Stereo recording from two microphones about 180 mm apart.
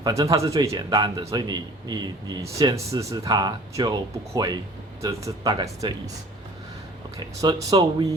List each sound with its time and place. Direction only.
0.0 s speech: 20° right (ahead or behind)
7.2 s speech: 25° right (ahead or behind)